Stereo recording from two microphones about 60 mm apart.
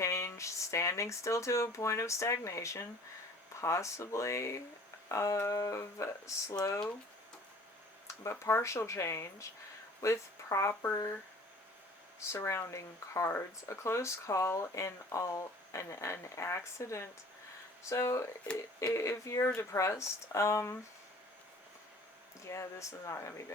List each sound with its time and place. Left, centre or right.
0.0 s speech: left
8.0 s speech: left
12.3 s speech: left
22.4 s speech: left